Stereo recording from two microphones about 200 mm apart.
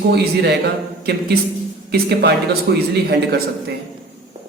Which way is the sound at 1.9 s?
55° right (ahead or behind).